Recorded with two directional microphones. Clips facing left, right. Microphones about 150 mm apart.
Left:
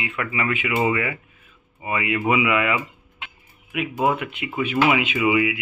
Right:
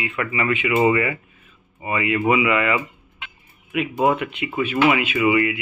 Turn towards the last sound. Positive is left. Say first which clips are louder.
# right 2 dB
turn(degrees=5)  # may be behind; listen again after turning